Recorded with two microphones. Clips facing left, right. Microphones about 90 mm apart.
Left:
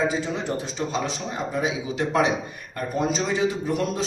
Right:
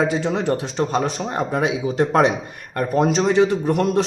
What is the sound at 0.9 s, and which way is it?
A man's voice, 55° right (ahead or behind).